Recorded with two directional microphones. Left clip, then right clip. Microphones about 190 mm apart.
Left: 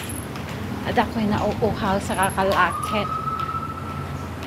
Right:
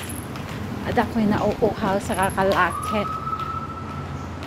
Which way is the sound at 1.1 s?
40° right (ahead or behind).